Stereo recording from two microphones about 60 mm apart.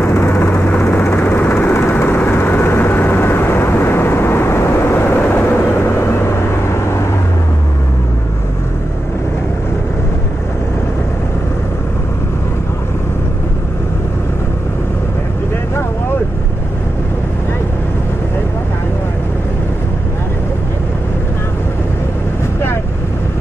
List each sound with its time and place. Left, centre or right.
0.0 s vehicle: left
1.2 s vehicle: left